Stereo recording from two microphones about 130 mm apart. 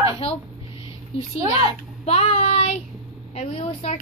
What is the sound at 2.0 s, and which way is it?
A woman's voice, 55° left (ahead or behind).